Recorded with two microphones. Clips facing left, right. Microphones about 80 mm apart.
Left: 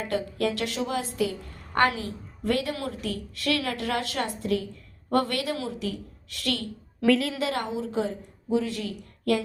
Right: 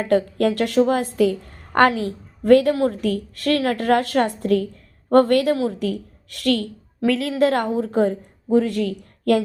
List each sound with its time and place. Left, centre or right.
0.0 s a woman's voice: right
7.0 s a woman's voice: centre
7.3 s a woman's voice: right